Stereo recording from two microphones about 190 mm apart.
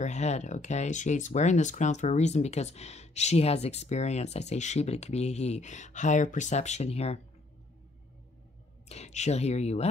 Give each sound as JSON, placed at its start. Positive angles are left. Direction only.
{"t": 0.0, "sound": "speech", "side_deg": 35}
{"t": 8.8, "sound": "speech", "side_deg": 35}